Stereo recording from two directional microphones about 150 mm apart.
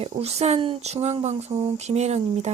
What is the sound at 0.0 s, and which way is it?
Speech, 45° right (ahead or behind).